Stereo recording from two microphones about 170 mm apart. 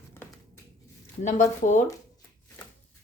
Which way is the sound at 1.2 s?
45° left (ahead or behind).